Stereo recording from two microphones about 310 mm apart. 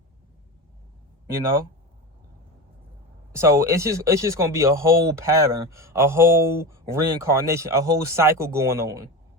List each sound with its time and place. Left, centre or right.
1.3 s speech: centre
3.3 s speech: centre